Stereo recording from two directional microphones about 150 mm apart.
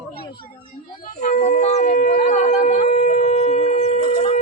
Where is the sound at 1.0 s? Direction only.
50° left (ahead or behind).